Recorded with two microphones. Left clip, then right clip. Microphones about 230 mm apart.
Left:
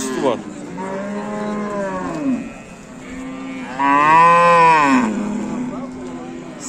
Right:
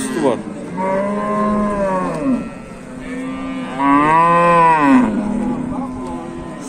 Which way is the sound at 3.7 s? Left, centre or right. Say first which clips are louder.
Left 1 dB; left.